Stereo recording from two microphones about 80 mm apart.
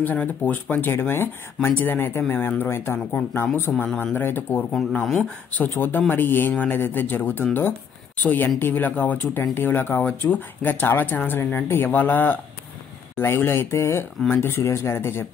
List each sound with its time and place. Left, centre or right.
0.0 s speech: left
4.9 s speech: centre
5.5 s speech: left